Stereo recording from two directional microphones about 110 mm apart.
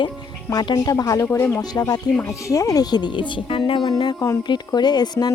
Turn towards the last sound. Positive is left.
turn(degrees=35)  # may be behind; listen again after turning